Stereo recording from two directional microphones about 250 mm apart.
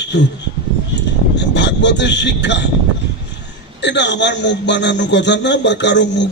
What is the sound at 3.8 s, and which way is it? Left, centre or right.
A man's voice, left.